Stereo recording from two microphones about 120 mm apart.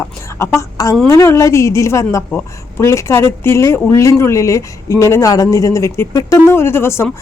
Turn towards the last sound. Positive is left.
turn(degrees=20)  # may be behind; listen again after turning